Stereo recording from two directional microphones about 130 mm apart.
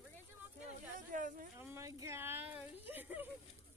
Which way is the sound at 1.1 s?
90° right.